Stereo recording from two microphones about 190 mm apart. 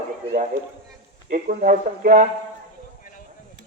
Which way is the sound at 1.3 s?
40° right (ahead or behind).